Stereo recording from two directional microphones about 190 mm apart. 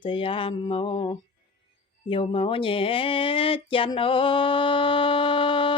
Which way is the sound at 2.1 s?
25° left (ahead or behind).